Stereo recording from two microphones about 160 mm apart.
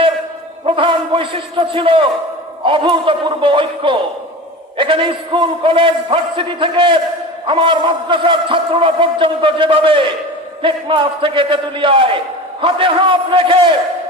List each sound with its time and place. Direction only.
0.6 s a man's voice: 30° right (ahead or behind)